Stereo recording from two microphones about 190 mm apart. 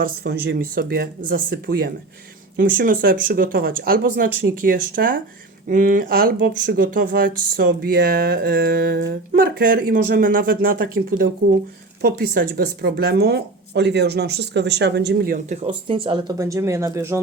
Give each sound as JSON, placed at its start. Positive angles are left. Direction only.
{"t": 0.0, "sound": "speech", "side_deg": -55}
{"t": 15.6, "sound": "speech", "side_deg": -25}